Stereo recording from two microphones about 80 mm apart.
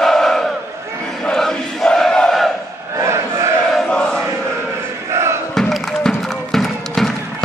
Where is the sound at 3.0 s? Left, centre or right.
Right.